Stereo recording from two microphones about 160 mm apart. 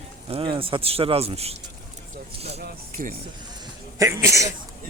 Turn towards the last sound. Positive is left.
turn(degrees=-20)  # may be behind; listen again after turning